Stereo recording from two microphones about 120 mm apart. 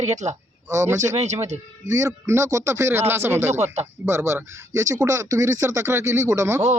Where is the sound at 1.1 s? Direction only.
70° right (ahead or behind).